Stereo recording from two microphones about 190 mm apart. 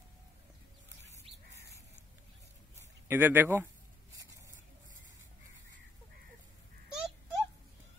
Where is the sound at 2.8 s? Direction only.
10° right (ahead or behind).